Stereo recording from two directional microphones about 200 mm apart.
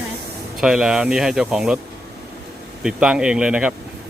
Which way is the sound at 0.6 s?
Centre (ahead or behind).